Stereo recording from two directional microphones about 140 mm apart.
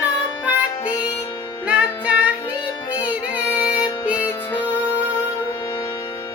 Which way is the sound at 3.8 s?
30° left (ahead or behind).